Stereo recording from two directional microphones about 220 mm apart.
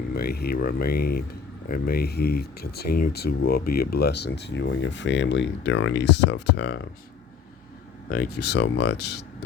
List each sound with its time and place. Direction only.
0.1 s speech: 45° left (ahead or behind)
8.1 s speech: 45° left (ahead or behind)